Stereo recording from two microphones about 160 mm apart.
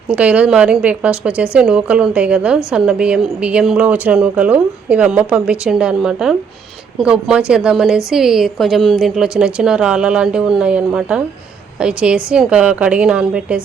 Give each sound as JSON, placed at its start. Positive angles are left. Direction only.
{"t": 0.1, "sound": "a woman's voice", "side_deg": -10}